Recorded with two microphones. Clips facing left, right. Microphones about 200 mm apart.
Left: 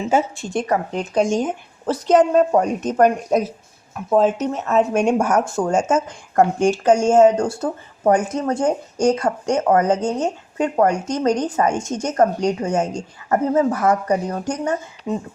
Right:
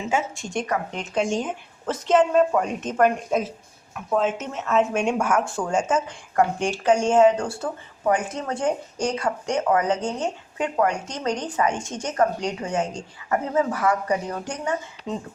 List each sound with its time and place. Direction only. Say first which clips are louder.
0.1 s a woman's voice: left 6 dB; 35° left (ahead or behind)